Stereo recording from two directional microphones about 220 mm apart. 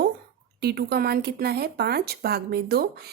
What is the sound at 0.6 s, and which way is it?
A woman's voice, 45° right (ahead or behind).